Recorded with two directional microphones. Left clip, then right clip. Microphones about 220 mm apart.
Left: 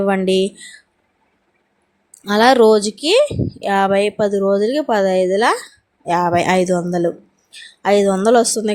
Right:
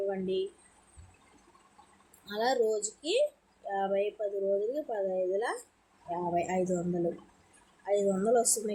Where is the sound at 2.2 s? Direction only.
40° left (ahead or behind).